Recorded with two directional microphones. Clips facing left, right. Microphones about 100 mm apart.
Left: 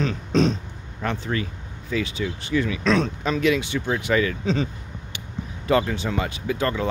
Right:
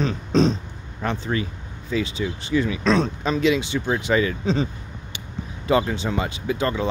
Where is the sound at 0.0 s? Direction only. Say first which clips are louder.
Right 1 dB; 30° right (ahead or behind).